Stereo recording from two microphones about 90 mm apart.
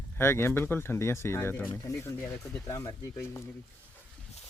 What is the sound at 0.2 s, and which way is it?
Speech, 25° left (ahead or behind).